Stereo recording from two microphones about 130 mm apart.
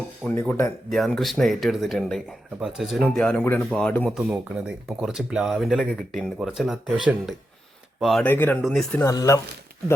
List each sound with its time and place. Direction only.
0.2 s speech: 5° left (ahead or behind)
4.1 s speech: 10° right (ahead or behind)
8.2 s speech: 15° left (ahead or behind)
9.0 s speech: 25° left (ahead or behind)